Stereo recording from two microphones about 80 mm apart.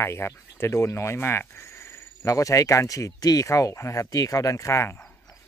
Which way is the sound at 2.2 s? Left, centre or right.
Left.